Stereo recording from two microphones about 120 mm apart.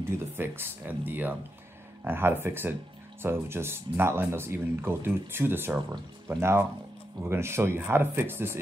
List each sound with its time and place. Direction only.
0.4 s speech: 15° right (ahead or behind)